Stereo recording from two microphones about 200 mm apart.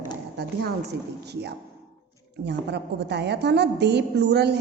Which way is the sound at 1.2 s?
55° right (ahead or behind).